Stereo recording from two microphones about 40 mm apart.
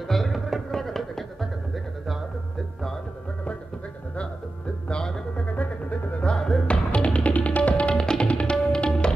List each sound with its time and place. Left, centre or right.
0.1 s music: centre
4.8 s music: left
5.4 s music: left
6.3 s music: centre
7.3 s music: left
7.9 s tabla: centre